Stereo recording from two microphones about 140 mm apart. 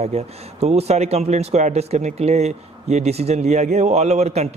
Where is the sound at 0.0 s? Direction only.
50° right (ahead or behind).